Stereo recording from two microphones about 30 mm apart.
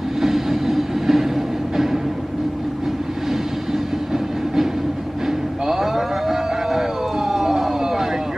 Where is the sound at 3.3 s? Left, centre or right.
Centre.